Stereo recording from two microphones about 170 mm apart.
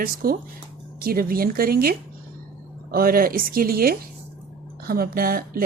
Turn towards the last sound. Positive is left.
turn(degrees=-60)  # may be behind; listen again after turning